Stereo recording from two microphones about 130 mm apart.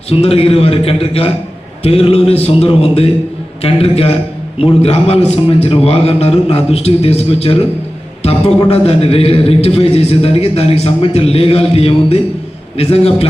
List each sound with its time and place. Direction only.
0.1 s a man's voice: 50° left (ahead or behind)